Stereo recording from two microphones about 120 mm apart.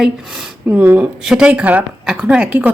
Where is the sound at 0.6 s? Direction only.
15° right (ahead or behind).